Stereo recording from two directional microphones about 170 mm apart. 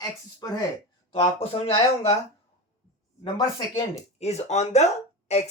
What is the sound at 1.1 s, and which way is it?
Speech, 35° left (ahead or behind).